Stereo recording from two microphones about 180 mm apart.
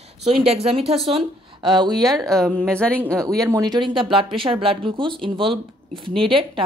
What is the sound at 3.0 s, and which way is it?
Speech, 15° right (ahead or behind).